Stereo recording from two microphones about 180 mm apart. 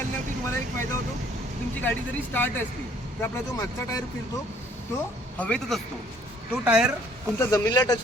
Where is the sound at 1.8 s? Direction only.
10° left (ahead or behind).